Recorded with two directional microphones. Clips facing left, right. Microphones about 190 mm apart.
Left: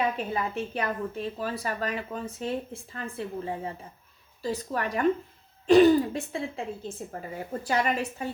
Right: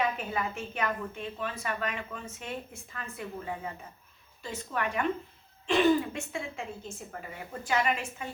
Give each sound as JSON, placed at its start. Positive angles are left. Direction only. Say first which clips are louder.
{"t": 0.0, "sound": "a woman's voice", "louder": "left 3 dB", "side_deg": 30}